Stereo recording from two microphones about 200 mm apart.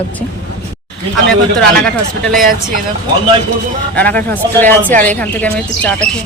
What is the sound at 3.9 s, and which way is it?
Speech, 10° left (ahead or behind).